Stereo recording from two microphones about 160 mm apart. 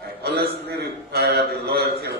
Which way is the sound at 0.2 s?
90° right.